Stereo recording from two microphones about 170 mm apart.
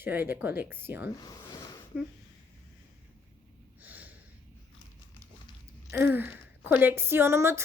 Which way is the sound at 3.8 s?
10° right (ahead or behind).